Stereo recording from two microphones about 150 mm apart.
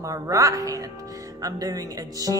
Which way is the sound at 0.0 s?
20° right (ahead or behind).